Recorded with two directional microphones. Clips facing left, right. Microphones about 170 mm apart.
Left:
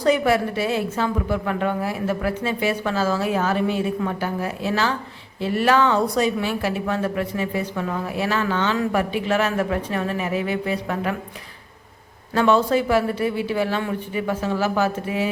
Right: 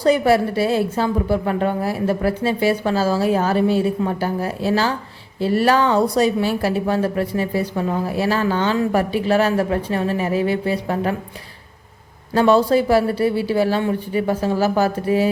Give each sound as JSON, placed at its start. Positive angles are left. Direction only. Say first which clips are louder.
{"t": 0.0, "sound": "speech", "louder": "right 3 dB", "side_deg": -35}
{"t": 12.3, "sound": "speech", "louder": "right 3 dB", "side_deg": -35}